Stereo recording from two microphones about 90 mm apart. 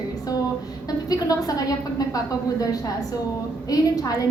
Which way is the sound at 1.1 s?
45° left (ahead or behind).